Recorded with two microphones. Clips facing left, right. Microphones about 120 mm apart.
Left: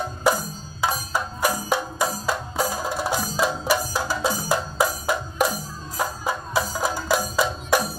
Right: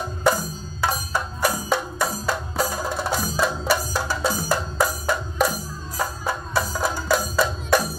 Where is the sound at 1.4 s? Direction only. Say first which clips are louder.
Right 1 dB; 15° left (ahead or behind).